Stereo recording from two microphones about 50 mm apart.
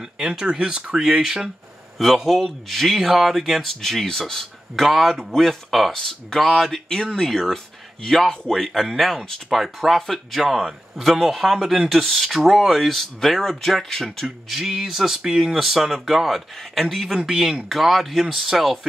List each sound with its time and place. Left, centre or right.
0.0 s speech: centre
4.8 s speech: centre
8.7 s speech: centre
14.5 s speech: centre
15.5 s speech: centre
17.0 s speech: centre